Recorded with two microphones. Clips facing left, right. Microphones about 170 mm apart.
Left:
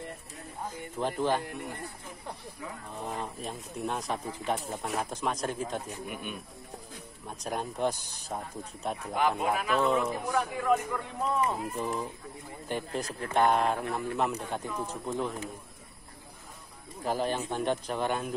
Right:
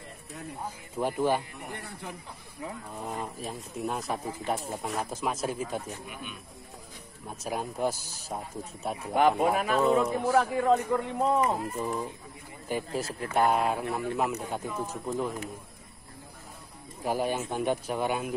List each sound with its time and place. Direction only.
0.9 s speech: 10° right (ahead or behind)
1.7 s speech: 70° right (ahead or behind)
3.1 s speech: 5° right (ahead or behind)
6.0 s a man's voice: 50° left (ahead or behind)
7.2 s speech: 5° right (ahead or behind)
9.6 s speech: 40° right (ahead or behind)
11.7 s speech: 5° right (ahead or behind)
17.0 s speech: 10° right (ahead or behind)